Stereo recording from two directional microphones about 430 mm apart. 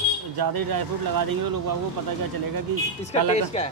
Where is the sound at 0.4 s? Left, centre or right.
Right.